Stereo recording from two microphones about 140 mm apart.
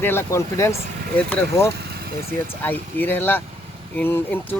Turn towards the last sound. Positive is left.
turn(degrees=15)  # may be behind; listen again after turning